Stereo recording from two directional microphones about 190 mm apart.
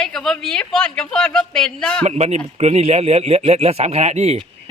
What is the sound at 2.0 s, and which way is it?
A man's voice, 35° right (ahead or behind).